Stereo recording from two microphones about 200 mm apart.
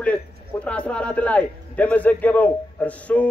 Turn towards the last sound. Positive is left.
turn(degrees=5)  # may be behind; listen again after turning